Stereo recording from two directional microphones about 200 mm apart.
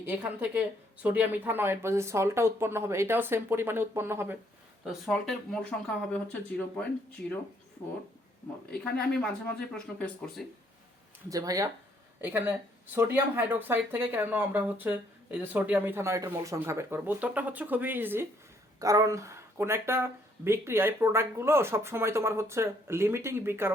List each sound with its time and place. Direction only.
0.0 s speech: 10° right (ahead or behind)
4.9 s speech: centre (ahead or behind)
9.1 s speech: 5° left (ahead or behind)
11.3 s speech: 15° right (ahead or behind)